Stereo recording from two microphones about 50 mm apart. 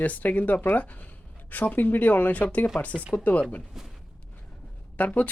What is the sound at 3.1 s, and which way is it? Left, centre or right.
Speech, left.